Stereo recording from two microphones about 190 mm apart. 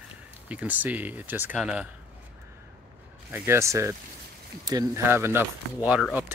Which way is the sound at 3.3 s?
15° right (ahead or behind).